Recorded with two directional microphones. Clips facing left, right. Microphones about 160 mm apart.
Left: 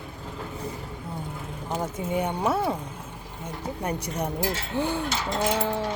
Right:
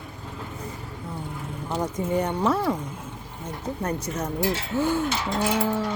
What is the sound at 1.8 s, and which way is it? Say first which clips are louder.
Speech: right 3 dB; 10° left (ahead or behind).